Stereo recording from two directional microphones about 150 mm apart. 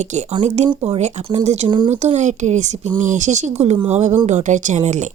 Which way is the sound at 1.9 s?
50° right (ahead or behind).